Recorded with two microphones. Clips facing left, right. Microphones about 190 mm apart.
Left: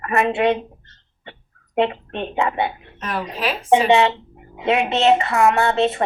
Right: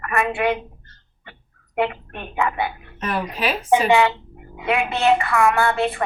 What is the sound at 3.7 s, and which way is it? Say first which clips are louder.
A woman's voice: left 2 dB; 25° left (ahead or behind).